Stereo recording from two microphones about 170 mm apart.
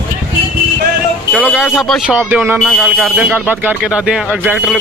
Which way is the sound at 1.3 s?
5° right (ahead or behind).